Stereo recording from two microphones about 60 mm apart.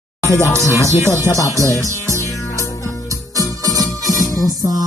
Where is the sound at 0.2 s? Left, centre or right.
Left.